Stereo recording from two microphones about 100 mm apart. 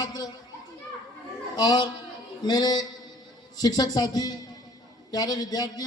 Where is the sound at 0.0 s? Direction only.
45° left (ahead or behind).